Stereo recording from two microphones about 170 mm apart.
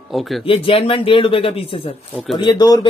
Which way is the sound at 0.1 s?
Centre (ahead or behind).